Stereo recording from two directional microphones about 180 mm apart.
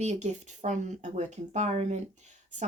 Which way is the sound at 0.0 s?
40° right (ahead or behind).